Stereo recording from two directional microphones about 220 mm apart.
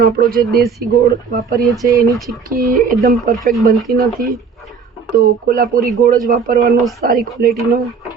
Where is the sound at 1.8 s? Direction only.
15° right (ahead or behind).